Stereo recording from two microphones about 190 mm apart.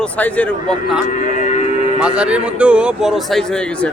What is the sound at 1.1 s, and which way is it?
Speech, 40° left (ahead or behind).